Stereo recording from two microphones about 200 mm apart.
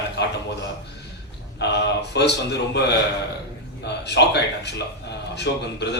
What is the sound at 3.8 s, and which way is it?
A man's voice, 60° left (ahead or behind).